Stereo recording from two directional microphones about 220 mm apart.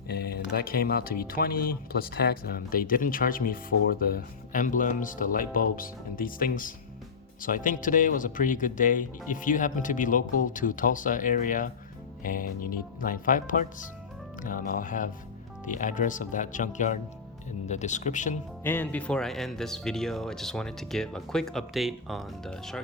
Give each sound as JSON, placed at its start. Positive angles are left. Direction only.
{"t": 0.1, "sound": "speech", "side_deg": 45}
{"t": 18.6, "sound": "speech", "side_deg": 10}